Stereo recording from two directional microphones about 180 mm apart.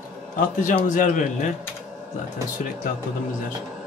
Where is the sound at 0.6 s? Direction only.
45° left (ahead or behind).